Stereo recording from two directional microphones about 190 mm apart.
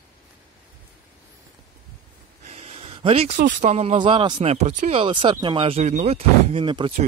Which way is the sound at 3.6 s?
35° right (ahead or behind).